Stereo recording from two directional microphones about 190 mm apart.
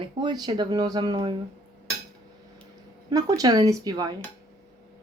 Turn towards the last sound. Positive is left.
turn(degrees=-20)  # may be behind; listen again after turning